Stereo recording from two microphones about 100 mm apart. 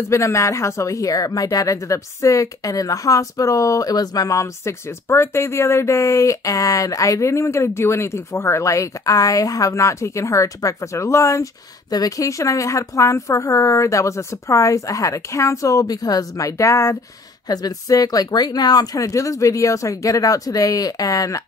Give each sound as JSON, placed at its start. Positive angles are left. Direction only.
{"t": 0.1, "sound": "speech", "side_deg": 30}